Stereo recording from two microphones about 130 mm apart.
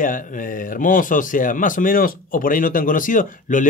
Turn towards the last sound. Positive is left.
turn(degrees=85)